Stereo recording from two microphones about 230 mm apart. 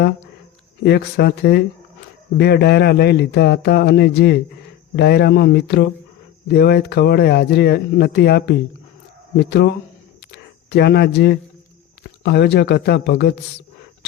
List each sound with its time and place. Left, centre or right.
0.8 s speech: left